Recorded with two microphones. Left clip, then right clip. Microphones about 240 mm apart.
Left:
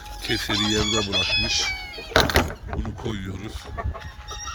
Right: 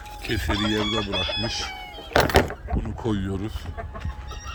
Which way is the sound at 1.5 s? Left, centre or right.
Centre.